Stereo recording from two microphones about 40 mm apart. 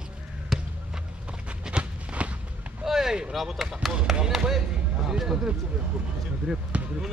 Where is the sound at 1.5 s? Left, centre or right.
Right.